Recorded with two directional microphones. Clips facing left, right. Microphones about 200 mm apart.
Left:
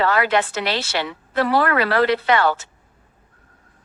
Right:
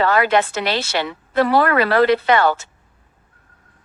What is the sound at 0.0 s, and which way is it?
A woman's voice, 45° right (ahead or behind).